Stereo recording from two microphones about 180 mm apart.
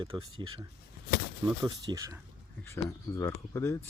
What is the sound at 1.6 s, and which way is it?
Speech, 20° right (ahead or behind).